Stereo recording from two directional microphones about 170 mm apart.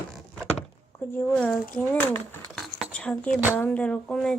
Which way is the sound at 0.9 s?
10° left (ahead or behind).